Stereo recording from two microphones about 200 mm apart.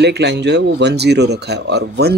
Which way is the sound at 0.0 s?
55° right (ahead or behind).